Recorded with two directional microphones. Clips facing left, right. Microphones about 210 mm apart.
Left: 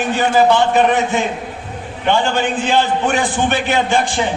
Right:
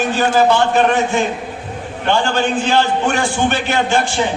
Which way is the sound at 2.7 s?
15° left (ahead or behind).